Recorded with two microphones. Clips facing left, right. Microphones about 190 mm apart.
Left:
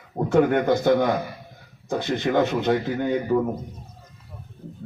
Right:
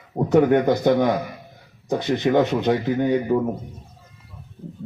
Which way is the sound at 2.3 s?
15° right (ahead or behind).